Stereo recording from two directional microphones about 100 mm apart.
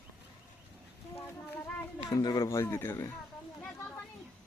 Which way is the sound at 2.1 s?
40° left (ahead or behind).